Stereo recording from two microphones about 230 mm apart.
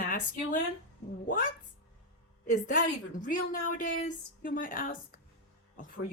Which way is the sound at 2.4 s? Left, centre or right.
Left.